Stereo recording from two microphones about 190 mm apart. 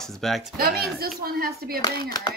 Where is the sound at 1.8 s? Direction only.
20° left (ahead or behind).